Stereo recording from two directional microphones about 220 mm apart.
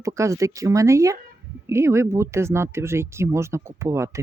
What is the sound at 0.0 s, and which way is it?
Speech, 15° right (ahead or behind).